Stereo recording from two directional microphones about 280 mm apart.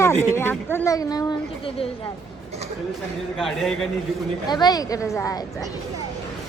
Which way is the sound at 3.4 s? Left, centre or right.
Centre.